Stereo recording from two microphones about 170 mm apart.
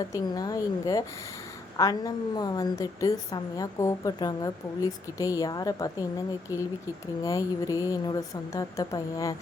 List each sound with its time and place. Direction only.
0.1 s a woman's voice: 20° left (ahead or behind)
7.3 s a woman's voice: 20° left (ahead or behind)